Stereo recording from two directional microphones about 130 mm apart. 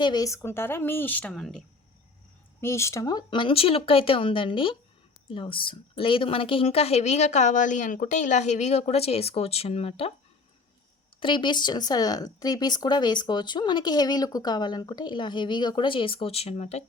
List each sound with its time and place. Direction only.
0.0 s speech: 30° left (ahead or behind); by 1.3 s 15° left (ahead or behind)
1.3 s speech: centre (ahead or behind)
2.6 s a woman's voice: 20° left (ahead or behind); by 10.1 s 50° left (ahead or behind)
11.2 s speech: 40° left (ahead or behind); by 16.8 s 55° left (ahead or behind)